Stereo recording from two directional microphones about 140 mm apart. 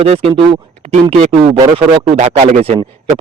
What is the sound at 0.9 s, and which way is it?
Speech, 50° right (ahead or behind).